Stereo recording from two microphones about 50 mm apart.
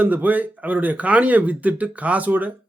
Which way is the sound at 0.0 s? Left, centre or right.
Right.